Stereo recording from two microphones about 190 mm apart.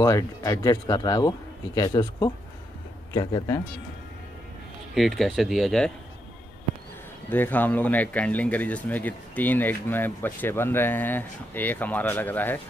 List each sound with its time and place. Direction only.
0.0 s speech: 15° left (ahead or behind)
4.9 s speech: centre (ahead or behind)
7.2 s speech: 10° left (ahead or behind)